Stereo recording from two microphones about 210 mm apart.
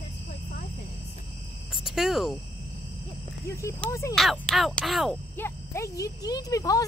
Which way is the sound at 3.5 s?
15° left (ahead or behind).